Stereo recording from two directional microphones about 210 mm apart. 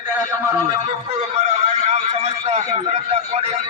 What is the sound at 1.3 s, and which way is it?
A man's voice, 30° right (ahead or behind).